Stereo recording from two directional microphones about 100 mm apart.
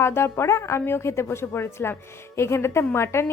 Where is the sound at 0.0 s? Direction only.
25° left (ahead or behind).